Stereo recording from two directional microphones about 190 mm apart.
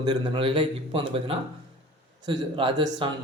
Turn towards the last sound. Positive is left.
turn(degrees=-25)  # may be behind; listen again after turning